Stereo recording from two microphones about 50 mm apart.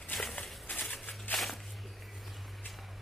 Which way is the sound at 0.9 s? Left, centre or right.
Left.